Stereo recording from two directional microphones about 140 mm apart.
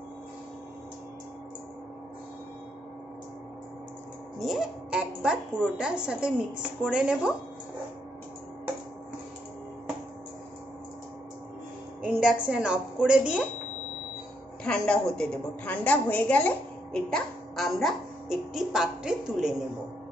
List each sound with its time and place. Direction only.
4.4 s a child's voice: centre (ahead or behind)
12.0 s a woman's voice: 10° right (ahead or behind)
14.6 s a woman's voice: 5° left (ahead or behind)